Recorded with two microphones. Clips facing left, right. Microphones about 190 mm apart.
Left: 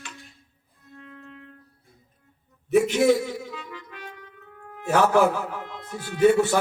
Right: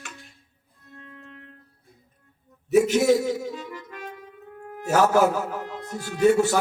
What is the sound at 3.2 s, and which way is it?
Music, 40° right (ahead or behind).